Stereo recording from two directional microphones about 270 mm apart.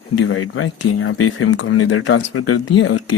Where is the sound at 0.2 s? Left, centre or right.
Left.